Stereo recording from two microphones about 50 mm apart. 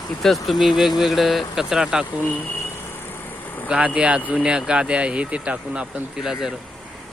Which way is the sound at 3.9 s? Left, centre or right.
Right.